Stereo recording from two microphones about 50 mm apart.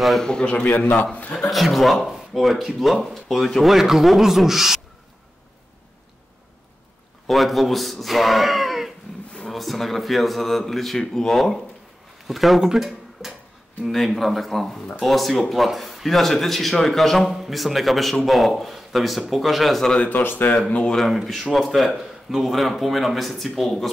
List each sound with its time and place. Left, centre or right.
0.2 s a man's voice: centre; by 1.0 s left
1.5 s speech: centre
3.7 s speech: centre
7.2 s speech: centre
20.1 s speech: left
20.9 s speech: centre